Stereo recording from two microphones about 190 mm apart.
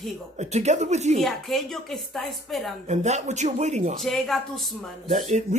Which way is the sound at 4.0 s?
Centre (ahead or behind).